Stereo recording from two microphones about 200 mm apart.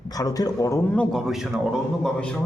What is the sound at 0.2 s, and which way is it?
Speech, 20° left (ahead or behind).